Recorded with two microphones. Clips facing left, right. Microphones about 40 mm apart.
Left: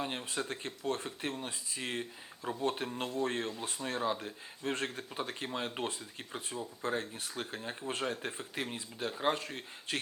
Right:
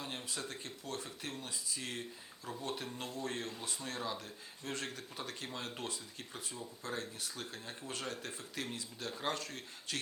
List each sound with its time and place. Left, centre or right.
0.0 s speech: left